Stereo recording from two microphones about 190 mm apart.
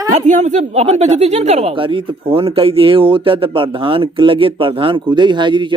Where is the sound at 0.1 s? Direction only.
40° right (ahead or behind).